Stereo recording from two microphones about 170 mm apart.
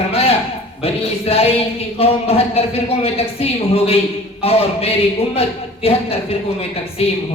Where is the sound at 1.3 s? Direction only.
35° left (ahead or behind).